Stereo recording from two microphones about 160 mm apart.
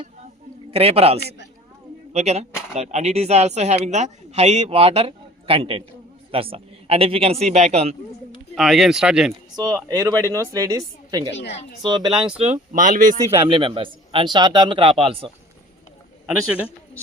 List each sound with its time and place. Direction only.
0.7 s a man's voice: 40° right (ahead or behind)
8.5 s speech: centre (ahead or behind)
9.6 s speech: 25° right (ahead or behind)
12.7 s speech: 55° right (ahead or behind)
13.4 s a man's voice: 35° right (ahead or behind)